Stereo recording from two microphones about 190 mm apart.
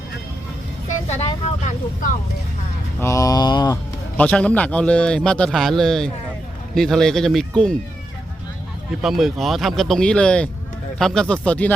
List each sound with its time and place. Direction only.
0.9 s vehicle: 35° left (ahead or behind)
3.0 s a sound: 15° left (ahead or behind)
4.2 s a man's voice: 5° left (ahead or behind)
9.0 s a man's voice: centre (ahead or behind)